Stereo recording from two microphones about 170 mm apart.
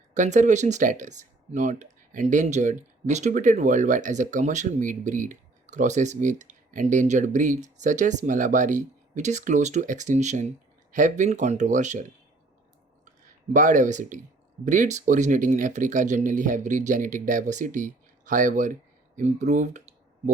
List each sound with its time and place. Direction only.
0.1 s speech: 45° right (ahead or behind)
13.5 s speech: 50° right (ahead or behind)